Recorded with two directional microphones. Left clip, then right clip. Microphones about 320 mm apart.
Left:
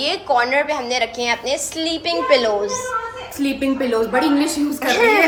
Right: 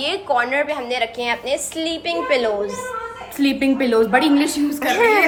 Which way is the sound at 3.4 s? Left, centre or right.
Centre.